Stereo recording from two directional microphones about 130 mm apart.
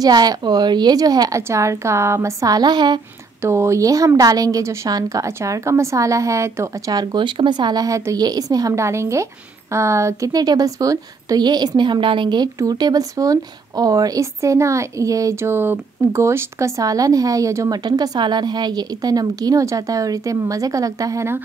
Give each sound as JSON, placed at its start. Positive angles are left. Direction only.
{"t": 0.0, "sound": "a woman's voice", "side_deg": -30}
{"t": 3.4, "sound": "a woman's voice", "side_deg": -20}